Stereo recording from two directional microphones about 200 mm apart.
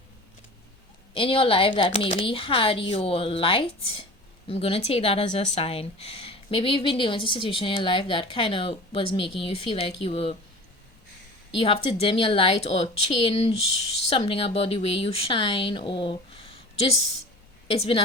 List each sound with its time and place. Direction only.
1.1 s a woman's voice: 25° left (ahead or behind)
11.5 s a woman's voice: 25° left (ahead or behind)